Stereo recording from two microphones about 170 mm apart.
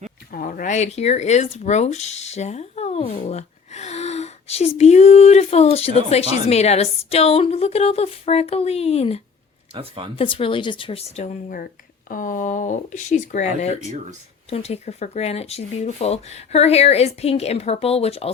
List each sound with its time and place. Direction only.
0.3 s speech: 55° left (ahead or behind); by 9.2 s 35° left (ahead or behind)
9.7 s speech: 30° right (ahead or behind)
10.2 s speech: 30° left (ahead or behind)
11.2 s speech: 55° left (ahead or behind); by 18.3 s 35° left (ahead or behind)